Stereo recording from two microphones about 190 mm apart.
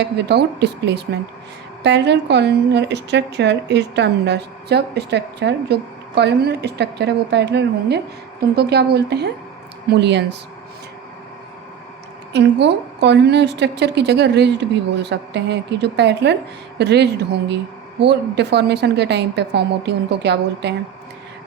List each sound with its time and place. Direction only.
0.0 s a woman's voice: 60° right (ahead or behind)
12.3 s a woman's voice: 65° right (ahead or behind)